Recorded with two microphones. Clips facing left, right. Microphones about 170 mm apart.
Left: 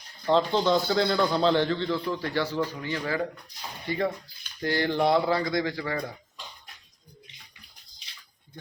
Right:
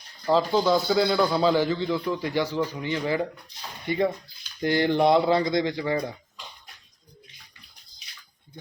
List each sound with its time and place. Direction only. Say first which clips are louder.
0.3 s a man's voice: right 1 dB; 5° right (ahead or behind)